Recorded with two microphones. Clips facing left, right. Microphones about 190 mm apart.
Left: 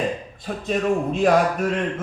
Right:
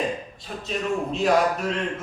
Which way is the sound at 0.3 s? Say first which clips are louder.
Left 6 dB; 50° left (ahead or behind).